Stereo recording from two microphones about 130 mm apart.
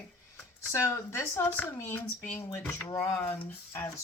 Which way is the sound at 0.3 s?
20° left (ahead or behind).